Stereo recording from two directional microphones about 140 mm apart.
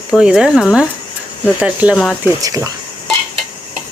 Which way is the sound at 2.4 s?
25° right (ahead or behind).